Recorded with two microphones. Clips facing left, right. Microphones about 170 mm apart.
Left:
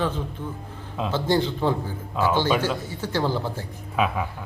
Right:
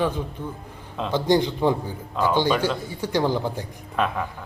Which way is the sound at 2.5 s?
10° left (ahead or behind).